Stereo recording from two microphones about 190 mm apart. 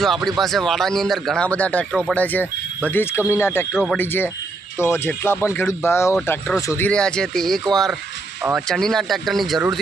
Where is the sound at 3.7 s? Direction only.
Centre (ahead or behind).